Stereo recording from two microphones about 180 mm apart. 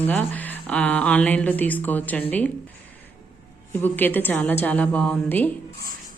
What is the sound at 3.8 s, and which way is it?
A woman's voice, 10° left (ahead or behind).